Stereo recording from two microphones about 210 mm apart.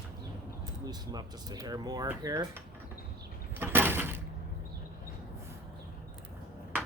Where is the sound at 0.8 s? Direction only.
20° right (ahead or behind).